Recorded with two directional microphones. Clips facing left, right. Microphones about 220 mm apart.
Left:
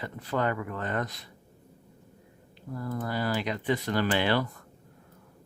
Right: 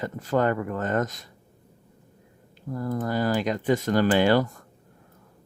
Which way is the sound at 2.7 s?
45° right (ahead or behind).